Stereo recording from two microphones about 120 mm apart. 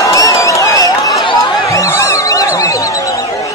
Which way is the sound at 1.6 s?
25° left (ahead or behind).